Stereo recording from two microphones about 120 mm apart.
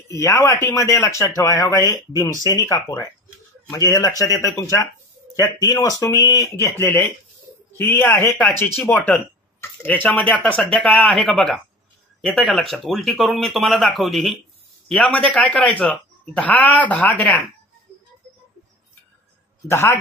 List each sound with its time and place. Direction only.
0.1 s a man's voice: 25° left (ahead or behind)
19.7 s a man's voice: 20° left (ahead or behind)